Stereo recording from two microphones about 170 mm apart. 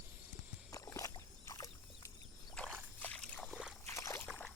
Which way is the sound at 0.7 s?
20° left (ahead or behind).